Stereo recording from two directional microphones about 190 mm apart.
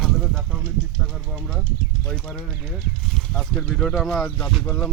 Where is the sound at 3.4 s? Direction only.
Centre (ahead or behind).